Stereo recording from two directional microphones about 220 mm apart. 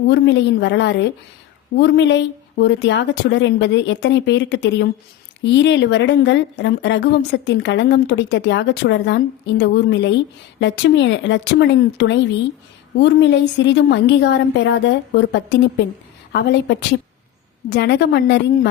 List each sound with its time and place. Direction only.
0.1 s a woman's voice: 55° left (ahead or behind)